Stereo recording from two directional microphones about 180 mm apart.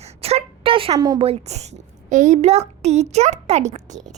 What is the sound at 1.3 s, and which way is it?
A child's voice, 35° right (ahead or behind).